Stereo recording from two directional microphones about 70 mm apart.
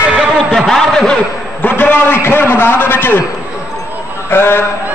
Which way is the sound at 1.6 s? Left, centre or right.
Left.